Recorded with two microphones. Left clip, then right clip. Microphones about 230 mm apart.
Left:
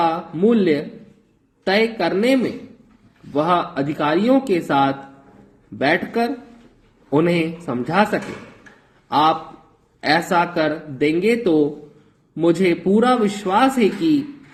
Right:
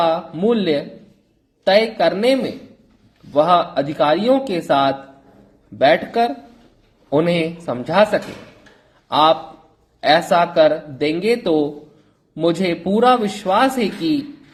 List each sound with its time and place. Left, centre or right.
0.0 s a man's voice: centre